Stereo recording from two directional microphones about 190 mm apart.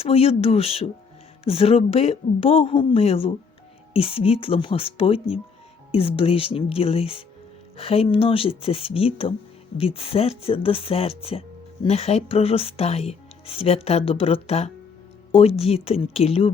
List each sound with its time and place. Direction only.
0.0 s speech: 30° left (ahead or behind)